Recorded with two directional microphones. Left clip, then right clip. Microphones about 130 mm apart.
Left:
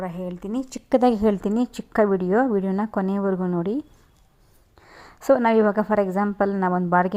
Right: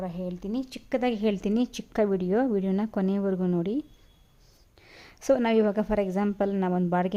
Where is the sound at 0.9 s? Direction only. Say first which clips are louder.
Left 9 dB; 40° left (ahead or behind).